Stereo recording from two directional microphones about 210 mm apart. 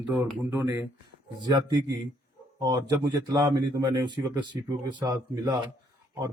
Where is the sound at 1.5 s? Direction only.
20° right (ahead or behind).